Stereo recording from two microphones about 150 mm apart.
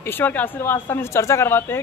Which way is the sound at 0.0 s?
15° left (ahead or behind).